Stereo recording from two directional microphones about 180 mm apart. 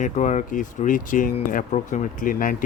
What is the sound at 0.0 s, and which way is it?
Speech, 45° left (ahead or behind).